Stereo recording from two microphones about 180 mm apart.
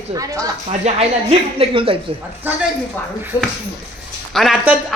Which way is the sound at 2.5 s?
10° right (ahead or behind).